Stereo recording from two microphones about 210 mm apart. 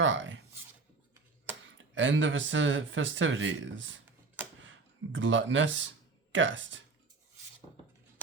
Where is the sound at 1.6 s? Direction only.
65° right (ahead or behind).